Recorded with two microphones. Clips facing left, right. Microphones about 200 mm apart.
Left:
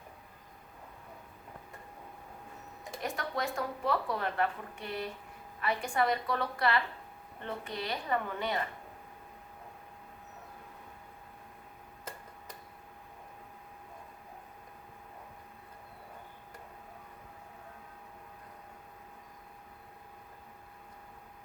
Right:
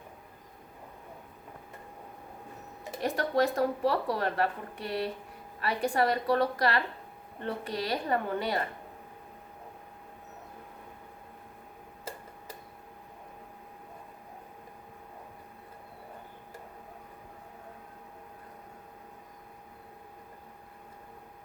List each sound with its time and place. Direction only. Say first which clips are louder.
3.0 s speech: right 8 dB; 35° right (ahead or behind)